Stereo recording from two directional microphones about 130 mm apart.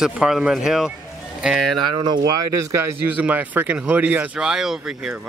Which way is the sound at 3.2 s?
15° right (ahead or behind).